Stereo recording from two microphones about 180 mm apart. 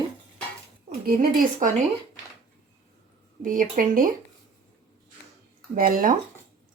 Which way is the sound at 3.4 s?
50° right (ahead or behind).